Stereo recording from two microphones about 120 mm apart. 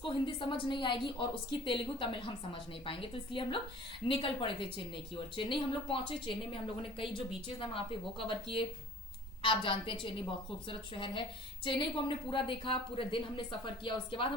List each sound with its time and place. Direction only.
0.0 s a woman's voice: 45° left (ahead or behind)
9.4 s a woman's voice: 45° left (ahead or behind)